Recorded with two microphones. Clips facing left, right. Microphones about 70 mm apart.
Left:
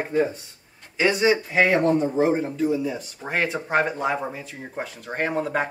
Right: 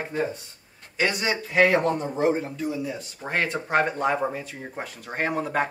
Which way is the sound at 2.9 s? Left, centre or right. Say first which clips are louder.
Left 1 dB; centre.